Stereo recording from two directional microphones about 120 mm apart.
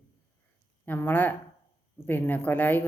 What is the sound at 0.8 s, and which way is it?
Speech, 15° left (ahead or behind).